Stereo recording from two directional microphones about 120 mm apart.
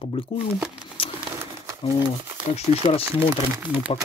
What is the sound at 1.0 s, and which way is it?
Crumpling, 50° left (ahead or behind).